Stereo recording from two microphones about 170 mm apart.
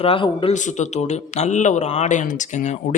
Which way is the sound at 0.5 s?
45° left (ahead or behind).